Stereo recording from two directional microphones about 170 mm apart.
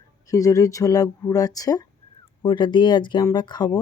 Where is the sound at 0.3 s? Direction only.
20° left (ahead or behind).